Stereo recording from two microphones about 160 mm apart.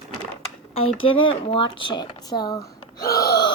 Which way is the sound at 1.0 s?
30° left (ahead or behind).